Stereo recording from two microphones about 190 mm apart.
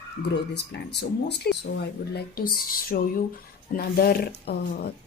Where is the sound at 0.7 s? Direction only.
60° left (ahead or behind).